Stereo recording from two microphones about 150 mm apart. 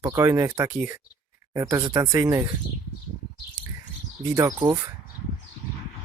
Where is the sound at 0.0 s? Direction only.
20° right (ahead or behind).